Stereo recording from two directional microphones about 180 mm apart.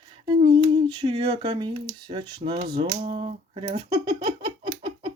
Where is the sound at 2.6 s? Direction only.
30° right (ahead or behind).